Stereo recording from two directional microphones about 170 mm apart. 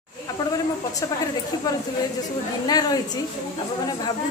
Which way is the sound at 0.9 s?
20° left (ahead or behind).